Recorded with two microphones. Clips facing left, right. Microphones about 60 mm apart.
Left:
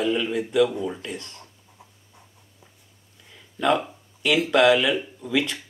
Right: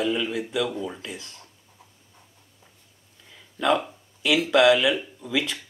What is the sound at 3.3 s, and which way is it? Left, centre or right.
Speech, centre.